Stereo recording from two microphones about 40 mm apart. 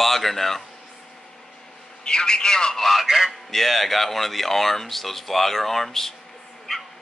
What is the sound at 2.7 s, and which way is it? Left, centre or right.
A man's voice, centre.